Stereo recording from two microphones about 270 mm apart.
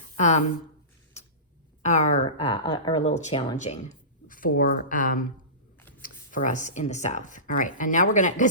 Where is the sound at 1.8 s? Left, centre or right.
Left.